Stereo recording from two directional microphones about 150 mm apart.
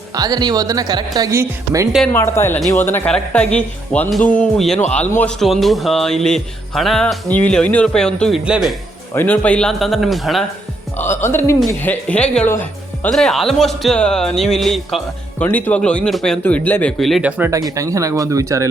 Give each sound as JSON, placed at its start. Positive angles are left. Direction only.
{"t": 0.1, "sound": "speech", "side_deg": -25}
{"t": 2.1, "sound": "speech", "side_deg": 15}
{"t": 8.4, "sound": "speech", "side_deg": -5}
{"t": 9.1, "sound": "speech", "side_deg": 10}
{"t": 10.9, "sound": "speech", "side_deg": 15}
{"t": 16.4, "sound": "speech", "side_deg": 10}
{"t": 17.0, "sound": "speech", "side_deg": 0}
{"t": 17.5, "sound": "speech", "side_deg": -20}